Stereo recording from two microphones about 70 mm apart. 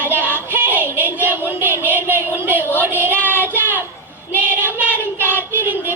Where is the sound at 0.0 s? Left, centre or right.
Right.